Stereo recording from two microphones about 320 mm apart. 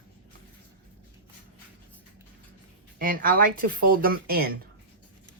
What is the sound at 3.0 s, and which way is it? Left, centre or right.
Speech, right.